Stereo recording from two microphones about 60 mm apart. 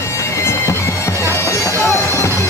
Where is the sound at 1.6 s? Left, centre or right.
Left.